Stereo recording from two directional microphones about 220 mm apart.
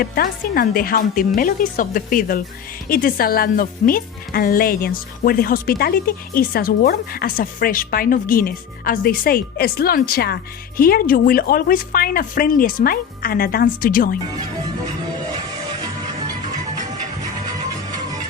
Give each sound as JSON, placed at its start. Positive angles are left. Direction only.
{"t": 0.0, "sound": "speech", "side_deg": 40}